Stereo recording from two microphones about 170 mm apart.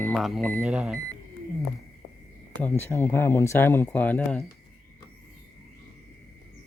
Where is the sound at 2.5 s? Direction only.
10° left (ahead or behind).